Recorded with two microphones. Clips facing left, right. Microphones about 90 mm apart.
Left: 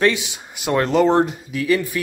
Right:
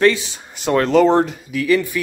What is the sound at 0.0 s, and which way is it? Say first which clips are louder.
Speech: right 3 dB; 15° left (ahead or behind).